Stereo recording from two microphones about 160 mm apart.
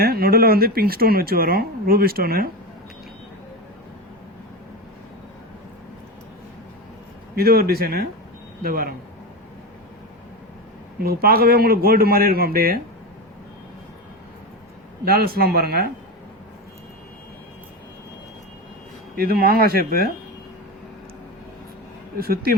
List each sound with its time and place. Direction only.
0.0 s speech: 70° right (ahead or behind)
7.3 s speech: 75° right (ahead or behind)
11.0 s speech: 70° right (ahead or behind)
15.0 s speech: 70° right (ahead or behind)
19.1 s speech: 70° right (ahead or behind)
22.2 s speech: 70° right (ahead or behind)